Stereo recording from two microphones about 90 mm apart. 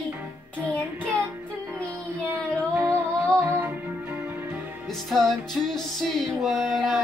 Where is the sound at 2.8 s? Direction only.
30° right (ahead or behind).